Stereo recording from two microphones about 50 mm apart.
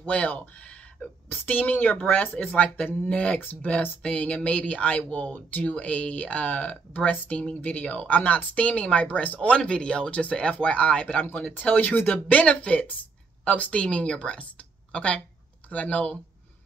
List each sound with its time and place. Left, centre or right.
0.0 s speech: left
9.6 s a woman's voice: centre